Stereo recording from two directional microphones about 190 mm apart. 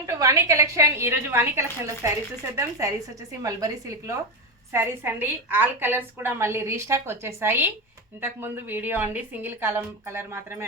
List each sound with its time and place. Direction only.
0.0 s a woman's voice: 15° right (ahead or behind)